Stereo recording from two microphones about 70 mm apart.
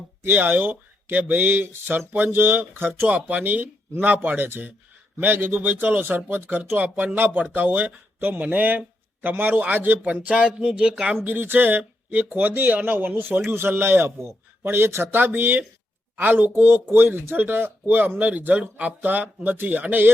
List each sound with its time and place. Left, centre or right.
0.2 s speech: right
3.1 s speech: right
11.2 s a man's voice: right